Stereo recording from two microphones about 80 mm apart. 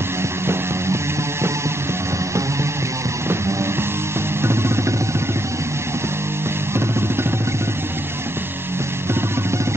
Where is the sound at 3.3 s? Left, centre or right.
Right.